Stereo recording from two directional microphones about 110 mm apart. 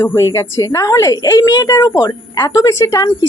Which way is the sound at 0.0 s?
25° left (ahead or behind).